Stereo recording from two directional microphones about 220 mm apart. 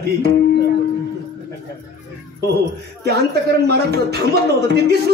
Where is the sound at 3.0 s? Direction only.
45° right (ahead or behind).